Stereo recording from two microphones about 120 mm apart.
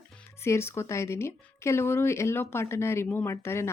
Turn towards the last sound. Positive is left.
turn(degrees=20)  # may be behind; listen again after turning